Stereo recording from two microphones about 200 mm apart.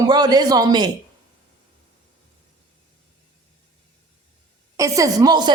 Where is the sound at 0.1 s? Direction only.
20° right (ahead or behind).